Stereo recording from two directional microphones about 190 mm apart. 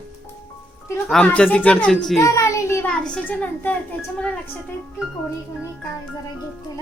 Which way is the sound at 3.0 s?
10° left (ahead or behind).